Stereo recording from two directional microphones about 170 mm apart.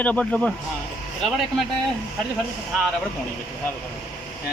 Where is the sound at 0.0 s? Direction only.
5° left (ahead or behind).